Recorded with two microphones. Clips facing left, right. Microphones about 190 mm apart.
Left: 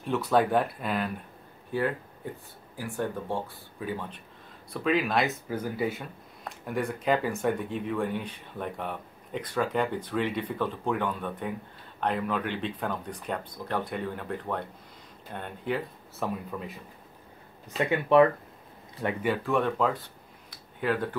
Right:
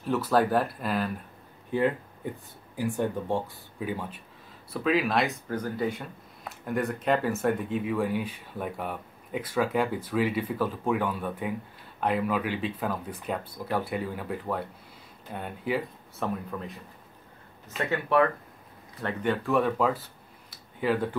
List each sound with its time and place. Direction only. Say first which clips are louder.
0.0 s speech: even; centre (ahead or behind)
2.7 s speech: right 4 dB; 15° right (ahead or behind)
4.7 s speech: right 1 dB; centre (ahead or behind)
17.6 s speech: left 3 dB; 15° left (ahead or behind)
19.0 s speech: even; 5° left (ahead or behind)